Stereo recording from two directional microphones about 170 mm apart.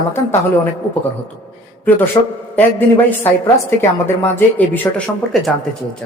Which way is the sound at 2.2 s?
25° left (ahead or behind).